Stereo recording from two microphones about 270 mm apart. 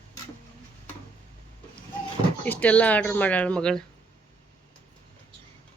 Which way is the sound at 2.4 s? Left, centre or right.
Centre.